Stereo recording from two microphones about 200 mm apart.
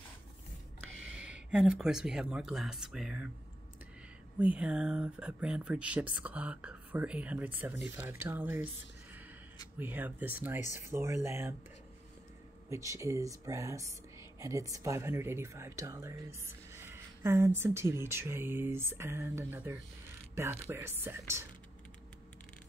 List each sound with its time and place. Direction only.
1.0 s speech: 5° right (ahead or behind)
4.4 s speech: 5° right (ahead or behind)
9.8 s speech: 10° right (ahead or behind)
12.6 s speech: 15° right (ahead or behind)